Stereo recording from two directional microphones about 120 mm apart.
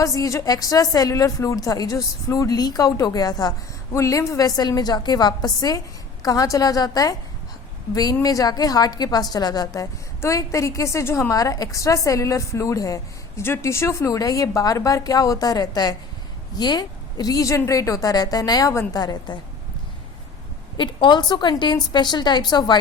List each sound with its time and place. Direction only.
0.0 s a woman's voice: 30° left (ahead or behind)
8.2 s a woman's voice: 30° left (ahead or behind)
19.3 s a woman's voice: 40° left (ahead or behind)
20.7 s a woman's voice: 40° left (ahead or behind)